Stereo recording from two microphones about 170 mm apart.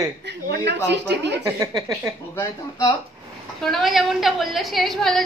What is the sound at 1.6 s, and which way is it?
Speech, 20° right (ahead or behind).